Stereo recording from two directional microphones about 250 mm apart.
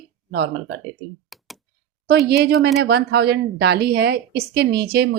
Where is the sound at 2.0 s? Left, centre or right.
Right.